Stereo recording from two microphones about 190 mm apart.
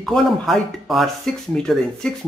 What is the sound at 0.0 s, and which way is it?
A man's voice, centre (ahead or behind).